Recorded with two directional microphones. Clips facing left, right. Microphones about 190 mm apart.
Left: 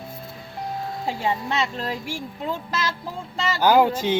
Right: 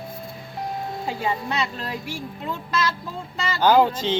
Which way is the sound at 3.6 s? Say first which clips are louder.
Even; 10° left (ahead or behind).